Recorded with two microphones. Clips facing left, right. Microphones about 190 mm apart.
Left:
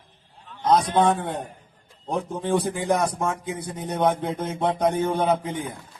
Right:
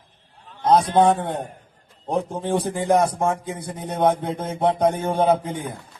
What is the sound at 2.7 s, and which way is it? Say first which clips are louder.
Speech: right 4 dB; 35° right (ahead or behind).